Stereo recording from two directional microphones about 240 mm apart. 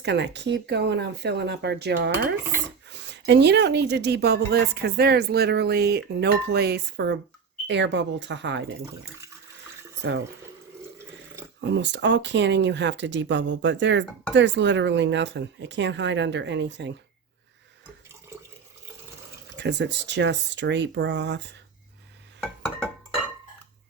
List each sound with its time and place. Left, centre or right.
0.0 s a woman's voice: right
11.6 s a woman's voice: right
19.5 s a woman's voice: right